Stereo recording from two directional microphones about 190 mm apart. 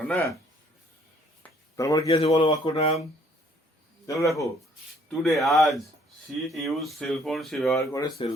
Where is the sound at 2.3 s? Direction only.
25° left (ahead or behind).